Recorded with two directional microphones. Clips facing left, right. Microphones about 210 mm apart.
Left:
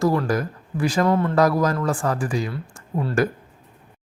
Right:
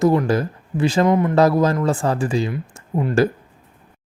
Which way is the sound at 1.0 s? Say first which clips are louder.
Right 3 dB; 15° right (ahead or behind).